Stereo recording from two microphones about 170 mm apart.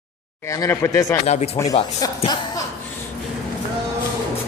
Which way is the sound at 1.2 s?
40° left (ahead or behind).